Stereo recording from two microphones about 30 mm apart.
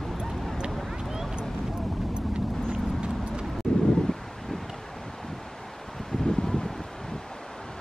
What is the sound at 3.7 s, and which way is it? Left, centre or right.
Wind, left.